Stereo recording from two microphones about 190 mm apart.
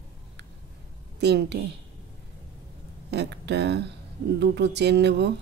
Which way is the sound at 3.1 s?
65° right (ahead or behind).